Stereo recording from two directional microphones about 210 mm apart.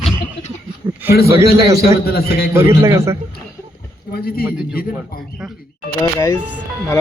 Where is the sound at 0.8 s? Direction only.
10° right (ahead or behind).